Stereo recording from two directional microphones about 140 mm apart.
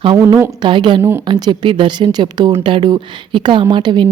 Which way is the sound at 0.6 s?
35° right (ahead or behind).